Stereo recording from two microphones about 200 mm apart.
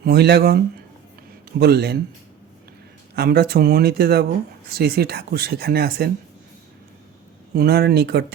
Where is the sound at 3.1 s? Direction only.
50° right (ahead or behind).